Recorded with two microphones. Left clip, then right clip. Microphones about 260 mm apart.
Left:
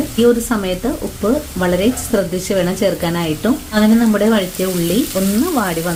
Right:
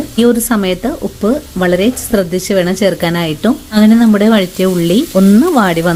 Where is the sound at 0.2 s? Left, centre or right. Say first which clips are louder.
Right 2 dB; right.